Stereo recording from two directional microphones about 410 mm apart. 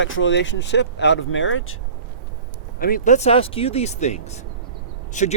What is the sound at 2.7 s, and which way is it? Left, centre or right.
Speech, left.